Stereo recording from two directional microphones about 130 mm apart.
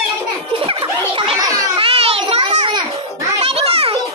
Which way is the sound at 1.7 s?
50° right (ahead or behind).